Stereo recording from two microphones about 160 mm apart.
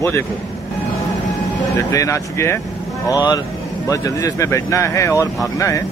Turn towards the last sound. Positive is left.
turn(degrees=20)  # may be behind; listen again after turning